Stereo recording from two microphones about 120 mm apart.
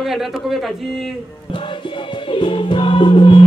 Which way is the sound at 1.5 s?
45° left (ahead or behind).